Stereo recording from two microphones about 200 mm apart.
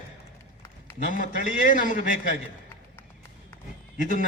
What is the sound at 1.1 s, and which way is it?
A man's voice, 40° left (ahead or behind).